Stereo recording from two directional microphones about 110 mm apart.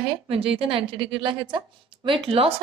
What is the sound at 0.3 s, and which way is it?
A woman's voice, 60° right (ahead or behind).